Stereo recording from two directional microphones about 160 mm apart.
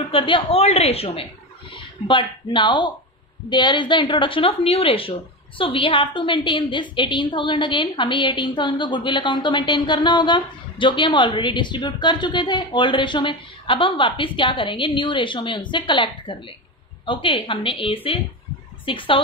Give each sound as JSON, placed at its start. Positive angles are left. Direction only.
{"t": 0.1, "sound": "a woman's voice", "side_deg": 30}